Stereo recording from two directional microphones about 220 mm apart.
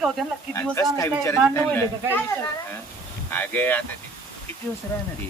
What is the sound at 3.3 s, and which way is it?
Speech, 10° left (ahead or behind).